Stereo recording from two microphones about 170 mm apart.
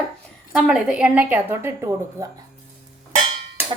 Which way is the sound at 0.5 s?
5° right (ahead or behind).